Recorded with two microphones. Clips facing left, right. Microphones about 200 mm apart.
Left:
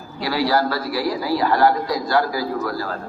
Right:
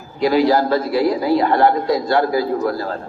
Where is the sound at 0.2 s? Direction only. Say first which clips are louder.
Right 5 dB; 20° right (ahead or behind).